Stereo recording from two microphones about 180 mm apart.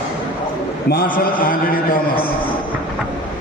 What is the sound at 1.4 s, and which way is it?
Speech, 55° left (ahead or behind).